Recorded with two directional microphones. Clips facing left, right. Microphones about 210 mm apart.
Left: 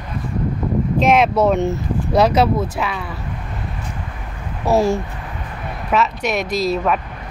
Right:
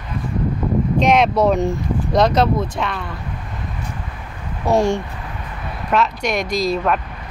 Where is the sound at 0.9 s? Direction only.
5° left (ahead or behind).